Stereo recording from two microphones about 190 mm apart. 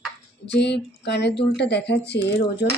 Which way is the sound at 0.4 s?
65° left (ahead or behind).